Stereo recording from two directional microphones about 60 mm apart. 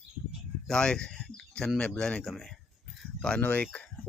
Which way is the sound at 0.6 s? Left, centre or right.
Centre.